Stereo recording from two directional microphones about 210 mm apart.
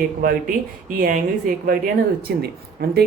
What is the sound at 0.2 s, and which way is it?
Speech, 45° right (ahead or behind).